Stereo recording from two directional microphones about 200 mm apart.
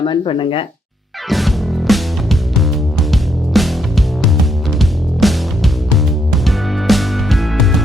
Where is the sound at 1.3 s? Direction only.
Centre (ahead or behind).